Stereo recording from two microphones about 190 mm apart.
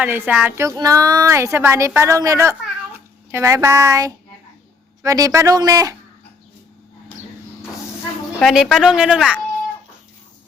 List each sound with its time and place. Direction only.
0.0 s speech: 5° right (ahead or behind)
8.4 s speech: centre (ahead or behind)